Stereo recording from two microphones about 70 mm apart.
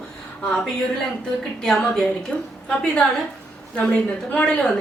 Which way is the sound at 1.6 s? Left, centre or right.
Centre.